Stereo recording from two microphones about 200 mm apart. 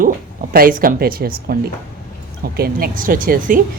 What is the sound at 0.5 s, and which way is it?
Speech, 45° right (ahead or behind).